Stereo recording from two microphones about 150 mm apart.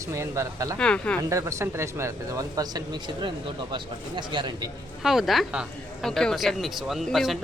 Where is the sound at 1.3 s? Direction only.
20° right (ahead or behind).